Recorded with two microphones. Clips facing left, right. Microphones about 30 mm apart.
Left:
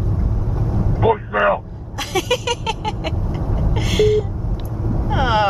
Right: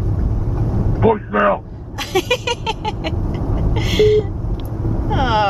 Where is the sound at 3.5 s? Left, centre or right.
Centre.